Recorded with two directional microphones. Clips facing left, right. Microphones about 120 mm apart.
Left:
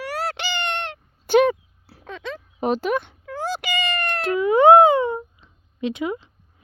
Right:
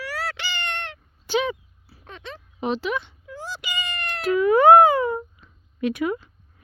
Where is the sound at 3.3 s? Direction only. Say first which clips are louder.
Left 7 dB; 80° left; by 4.2 s 60° left (ahead or behind).